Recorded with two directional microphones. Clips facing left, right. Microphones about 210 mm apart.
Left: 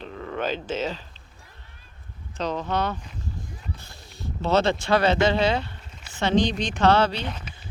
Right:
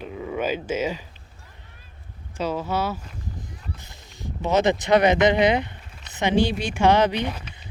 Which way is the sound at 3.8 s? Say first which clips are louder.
Even; 15° right (ahead or behind).